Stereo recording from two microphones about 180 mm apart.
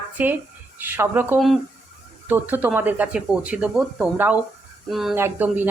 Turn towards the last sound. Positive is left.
turn(degrees=-10)  # may be behind; listen again after turning